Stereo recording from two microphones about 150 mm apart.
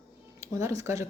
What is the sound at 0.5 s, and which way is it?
Speech, 20° right (ahead or behind).